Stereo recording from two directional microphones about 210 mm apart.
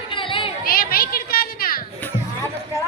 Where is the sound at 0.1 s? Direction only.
25° left (ahead or behind).